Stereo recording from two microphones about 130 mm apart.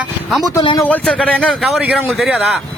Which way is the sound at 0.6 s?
35° left (ahead or behind).